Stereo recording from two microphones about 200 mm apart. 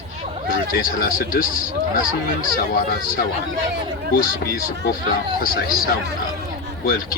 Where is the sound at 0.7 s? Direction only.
45° left (ahead or behind).